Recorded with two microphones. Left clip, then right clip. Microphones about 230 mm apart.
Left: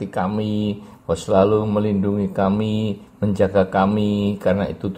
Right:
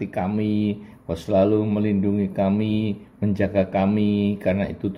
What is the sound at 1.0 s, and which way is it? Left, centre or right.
Speech, left.